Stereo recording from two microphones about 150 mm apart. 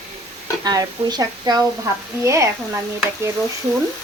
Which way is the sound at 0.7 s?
25° right (ahead or behind).